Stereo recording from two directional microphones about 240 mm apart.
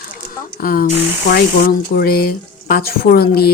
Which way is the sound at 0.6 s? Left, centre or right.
Left.